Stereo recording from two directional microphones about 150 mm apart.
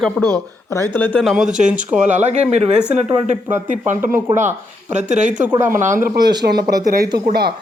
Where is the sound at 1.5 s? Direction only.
55° right (ahead or behind).